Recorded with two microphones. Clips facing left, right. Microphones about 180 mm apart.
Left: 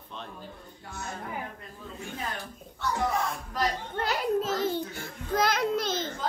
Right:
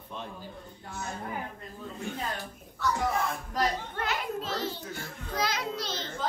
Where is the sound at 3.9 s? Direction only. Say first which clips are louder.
Left 5 dB; 40° left (ahead or behind).